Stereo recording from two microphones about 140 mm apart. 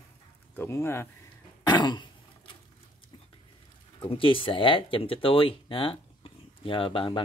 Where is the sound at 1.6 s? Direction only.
30° left (ahead or behind).